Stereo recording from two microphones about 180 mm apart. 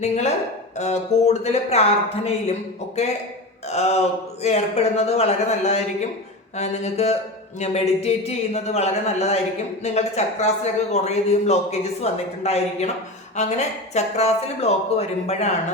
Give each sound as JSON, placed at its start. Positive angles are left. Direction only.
{"t": 0.0, "sound": "speech", "side_deg": 40}